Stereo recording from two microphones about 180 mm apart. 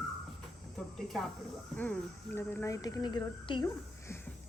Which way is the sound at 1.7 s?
10° left (ahead or behind).